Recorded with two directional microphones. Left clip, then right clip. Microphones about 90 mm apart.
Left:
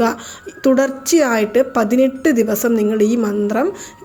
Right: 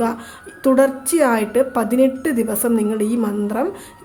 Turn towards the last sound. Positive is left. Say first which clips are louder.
# left 4 dB
turn(degrees=30)  # may be behind; listen again after turning